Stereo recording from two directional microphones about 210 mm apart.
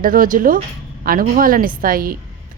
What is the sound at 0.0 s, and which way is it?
A woman's voice, 40° right (ahead or behind).